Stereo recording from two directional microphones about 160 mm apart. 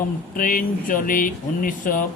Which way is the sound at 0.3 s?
60° left (ahead or behind).